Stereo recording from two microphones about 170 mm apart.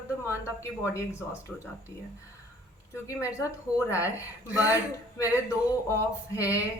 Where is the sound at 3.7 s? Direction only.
20° left (ahead or behind).